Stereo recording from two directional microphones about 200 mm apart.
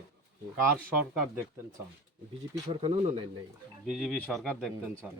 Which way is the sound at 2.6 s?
25° right (ahead or behind).